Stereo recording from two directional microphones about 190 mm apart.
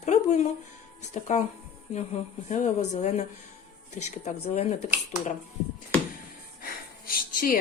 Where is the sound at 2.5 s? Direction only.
40° left (ahead or behind).